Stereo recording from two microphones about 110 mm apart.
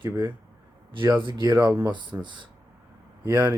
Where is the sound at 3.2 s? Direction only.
20° right (ahead or behind).